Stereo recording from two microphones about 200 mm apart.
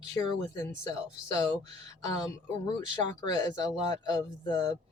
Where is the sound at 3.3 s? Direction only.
20° left (ahead or behind).